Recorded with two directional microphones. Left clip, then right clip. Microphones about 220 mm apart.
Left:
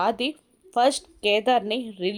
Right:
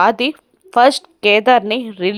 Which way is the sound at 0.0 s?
20° right (ahead or behind).